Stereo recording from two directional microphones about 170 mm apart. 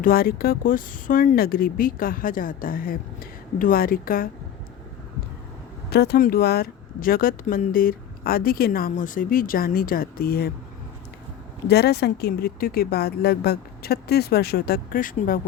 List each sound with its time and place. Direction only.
0.0 s speech: 60° left (ahead or behind)
5.9 s speech: 75° left (ahead or behind)
11.7 s speech: 75° left (ahead or behind); by 15.4 s 55° left (ahead or behind)